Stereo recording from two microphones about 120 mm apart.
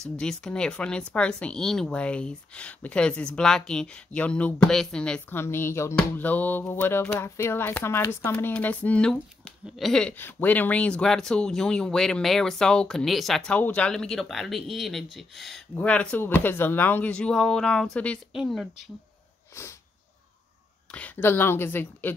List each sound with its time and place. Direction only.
0.2 s a woman's voice: 5° left (ahead or behind)
5.3 s a sound: 20° left (ahead or behind)
8.3 s a woman's voice: 15° left (ahead or behind)
20.9 s a woman's voice: 15° left (ahead or behind)